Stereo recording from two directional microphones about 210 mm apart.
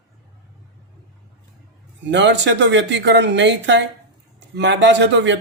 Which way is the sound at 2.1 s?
55° right (ahead or behind).